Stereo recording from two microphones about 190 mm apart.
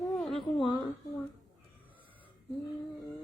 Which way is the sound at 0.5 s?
25° left (ahead or behind).